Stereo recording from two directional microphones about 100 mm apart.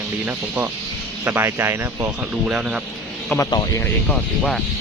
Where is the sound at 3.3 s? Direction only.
30° left (ahead or behind).